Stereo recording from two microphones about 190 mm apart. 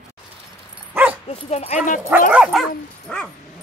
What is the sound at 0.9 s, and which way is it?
Dog, 10° right (ahead or behind).